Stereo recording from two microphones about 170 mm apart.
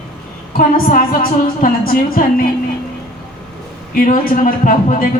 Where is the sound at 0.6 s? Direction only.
55° left (ahead or behind).